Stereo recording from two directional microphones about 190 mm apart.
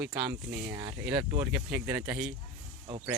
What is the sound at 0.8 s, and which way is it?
Speech, 20° right (ahead or behind).